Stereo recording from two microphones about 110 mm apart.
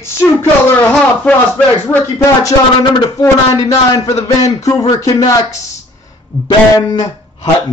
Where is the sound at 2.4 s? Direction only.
35° left (ahead or behind).